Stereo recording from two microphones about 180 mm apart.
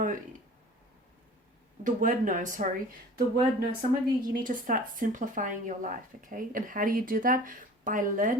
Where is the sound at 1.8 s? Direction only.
45° right (ahead or behind).